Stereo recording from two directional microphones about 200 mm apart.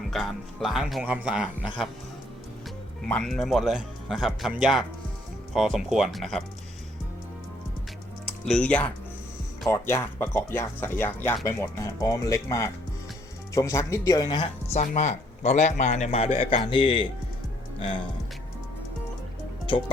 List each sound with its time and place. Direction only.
0.1 s speech: centre (ahead or behind)
3.1 s speech: 5° left (ahead or behind)
8.4 s speech: 5° left (ahead or behind); by 17.1 s 25° left (ahead or behind)
19.7 s music: 25° left (ahead or behind)